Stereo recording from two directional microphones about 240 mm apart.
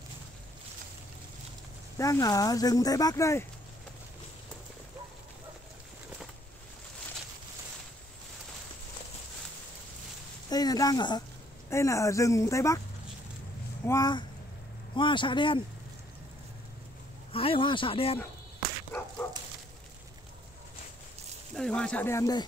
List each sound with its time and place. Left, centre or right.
2.0 s speech: centre
10.5 s speech: centre
13.8 s speech: centre
17.3 s speech: left
19.2 s dog: centre
21.5 s speech: centre